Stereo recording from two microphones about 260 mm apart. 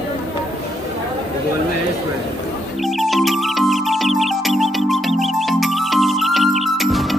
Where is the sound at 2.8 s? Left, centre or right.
Centre.